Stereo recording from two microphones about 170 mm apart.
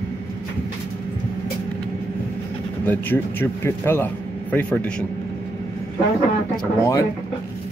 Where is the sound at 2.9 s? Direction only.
10° left (ahead or behind).